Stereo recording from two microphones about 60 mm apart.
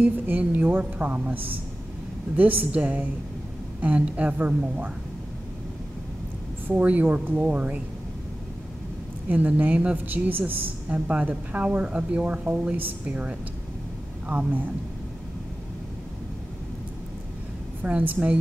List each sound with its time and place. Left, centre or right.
0.0 s speech: right
6.7 s speech: right
9.3 s speech: right
13.0 s speech: right
17.8 s speech: right